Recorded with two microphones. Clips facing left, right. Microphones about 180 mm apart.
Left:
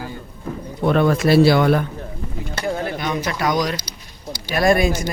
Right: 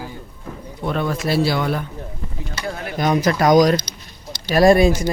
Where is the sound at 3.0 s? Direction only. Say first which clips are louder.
Right 9 dB; 40° right (ahead or behind).